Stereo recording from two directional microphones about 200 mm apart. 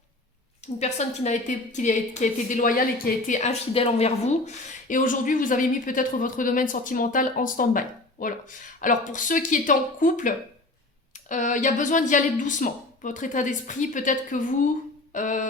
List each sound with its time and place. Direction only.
0.8 s a woman's voice: 35° left (ahead or behind)